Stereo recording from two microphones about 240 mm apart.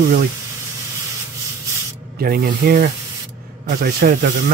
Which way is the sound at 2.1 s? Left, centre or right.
Right.